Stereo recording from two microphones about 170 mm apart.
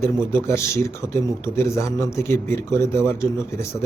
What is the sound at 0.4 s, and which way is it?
A man's voice, 15° left (ahead or behind).